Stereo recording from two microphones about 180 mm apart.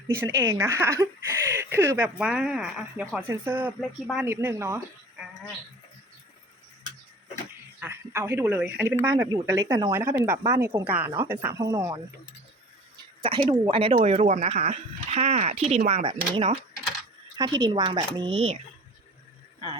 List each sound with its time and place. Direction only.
0.2 s a woman's voice: 15° right (ahead or behind)
3.8 s speech: centre (ahead or behind)
4.3 s speech: 15° right (ahead or behind)
7.8 s a woman's voice: 15° right (ahead or behind)
11.4 s a woman's voice: 20° right (ahead or behind)
13.2 s speech: 30° right (ahead or behind)